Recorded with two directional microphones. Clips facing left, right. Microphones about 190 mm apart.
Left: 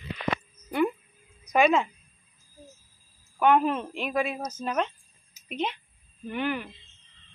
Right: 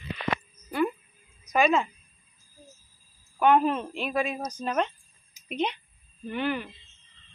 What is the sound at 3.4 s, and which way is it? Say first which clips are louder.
A woman's voice: even; 10° left (ahead or behind).